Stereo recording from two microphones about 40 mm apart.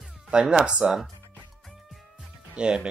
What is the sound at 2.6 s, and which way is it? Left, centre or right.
Speech, right.